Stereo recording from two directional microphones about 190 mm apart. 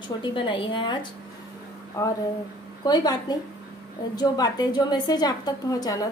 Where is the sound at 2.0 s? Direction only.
10° left (ahead or behind).